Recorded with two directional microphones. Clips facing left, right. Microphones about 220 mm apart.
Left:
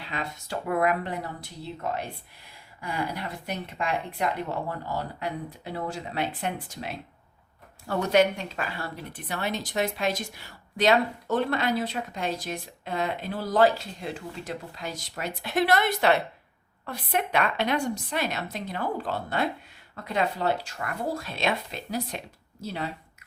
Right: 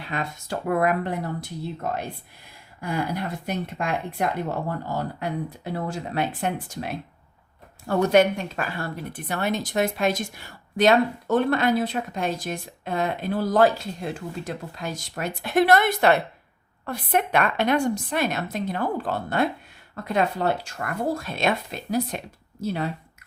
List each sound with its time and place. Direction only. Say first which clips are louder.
0.1 s a woman's voice: right 4 dB; 50° right (ahead or behind)
2.8 s a woman's voice: right 4 dB; 45° right (ahead or behind)